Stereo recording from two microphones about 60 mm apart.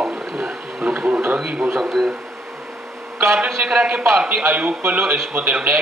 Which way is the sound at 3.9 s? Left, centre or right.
Right.